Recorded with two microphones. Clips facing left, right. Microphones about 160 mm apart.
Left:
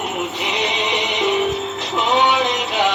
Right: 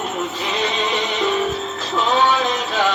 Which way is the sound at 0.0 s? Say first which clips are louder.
Even; 15° left (ahead or behind).